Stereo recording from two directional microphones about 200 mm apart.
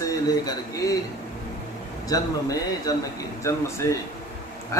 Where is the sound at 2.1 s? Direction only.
20° left (ahead or behind).